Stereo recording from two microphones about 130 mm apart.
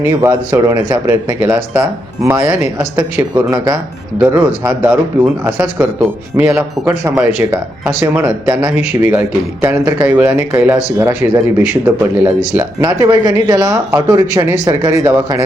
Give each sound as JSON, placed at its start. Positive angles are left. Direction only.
{"t": 0.0, "sound": "speech", "side_deg": -20}
{"t": 12.8, "sound": "speech", "side_deg": -25}